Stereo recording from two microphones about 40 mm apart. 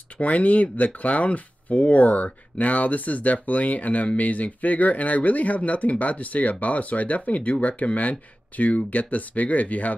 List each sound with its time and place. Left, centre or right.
0.2 s speech: left